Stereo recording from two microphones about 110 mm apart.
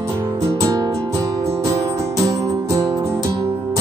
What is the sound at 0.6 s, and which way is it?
Music, 30° right (ahead or behind).